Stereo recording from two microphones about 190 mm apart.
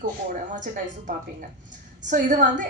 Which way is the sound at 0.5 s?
40° right (ahead or behind).